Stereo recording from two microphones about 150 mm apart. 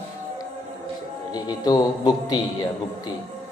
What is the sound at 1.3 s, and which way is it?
A man's voice, 25° left (ahead or behind).